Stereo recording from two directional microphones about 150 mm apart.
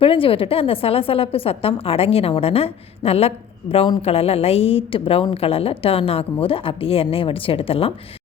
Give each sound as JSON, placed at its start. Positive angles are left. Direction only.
{"t": 0.0, "sound": "a woman's voice", "side_deg": 35}